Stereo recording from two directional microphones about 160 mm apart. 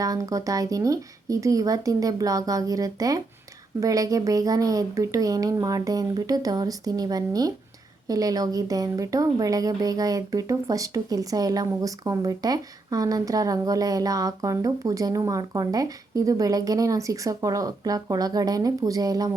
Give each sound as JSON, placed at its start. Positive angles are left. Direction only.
{"t": 0.0, "sound": "speech", "side_deg": -20}